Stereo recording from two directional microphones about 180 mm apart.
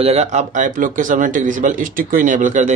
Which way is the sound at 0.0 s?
35° right (ahead or behind).